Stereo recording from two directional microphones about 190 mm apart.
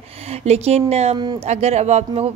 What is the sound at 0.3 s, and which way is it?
Speech, 35° right (ahead or behind).